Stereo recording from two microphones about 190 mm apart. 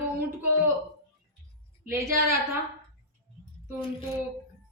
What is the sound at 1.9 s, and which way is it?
Speech, 15° right (ahead or behind).